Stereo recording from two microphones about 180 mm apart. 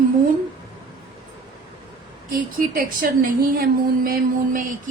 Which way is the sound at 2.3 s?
50° right (ahead or behind).